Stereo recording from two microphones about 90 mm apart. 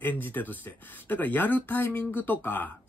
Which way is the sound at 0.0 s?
20° left (ahead or behind).